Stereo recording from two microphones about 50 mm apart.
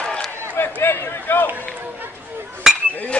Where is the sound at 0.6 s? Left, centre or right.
Left.